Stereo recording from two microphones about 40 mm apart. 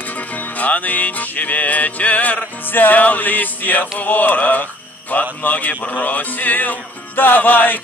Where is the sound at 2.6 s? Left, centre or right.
Left.